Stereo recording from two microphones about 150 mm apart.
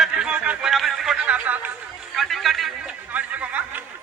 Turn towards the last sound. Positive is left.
turn(degrees=-10)  # may be behind; listen again after turning